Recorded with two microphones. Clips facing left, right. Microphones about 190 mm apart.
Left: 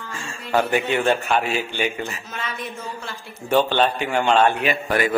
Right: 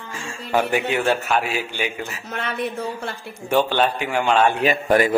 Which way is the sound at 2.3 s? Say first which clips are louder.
Right 5 dB; 60° right (ahead or behind).